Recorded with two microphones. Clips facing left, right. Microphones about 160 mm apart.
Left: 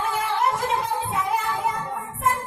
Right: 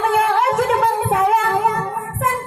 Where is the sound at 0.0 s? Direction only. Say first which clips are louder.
Right 7 dB; 65° right (ahead or behind).